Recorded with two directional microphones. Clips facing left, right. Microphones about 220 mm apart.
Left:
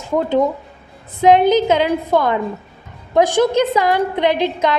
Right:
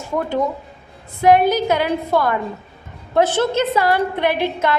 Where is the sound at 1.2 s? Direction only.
20° left (ahead or behind).